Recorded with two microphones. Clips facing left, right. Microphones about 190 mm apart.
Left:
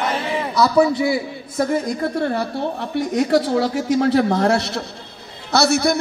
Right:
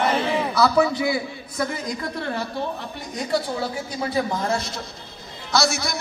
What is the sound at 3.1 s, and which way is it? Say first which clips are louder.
A man's voice: left 7 dB; 75° left (ahead or behind).